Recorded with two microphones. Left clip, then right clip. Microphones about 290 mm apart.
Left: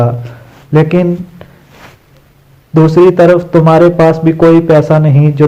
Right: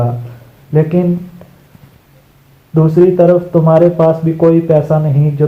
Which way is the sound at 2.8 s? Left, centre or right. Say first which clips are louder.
Left 3 dB; left.